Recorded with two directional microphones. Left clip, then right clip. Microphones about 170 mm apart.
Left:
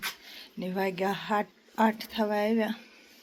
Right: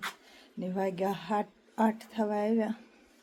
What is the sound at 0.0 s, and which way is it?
Speech, 5° right (ahead or behind).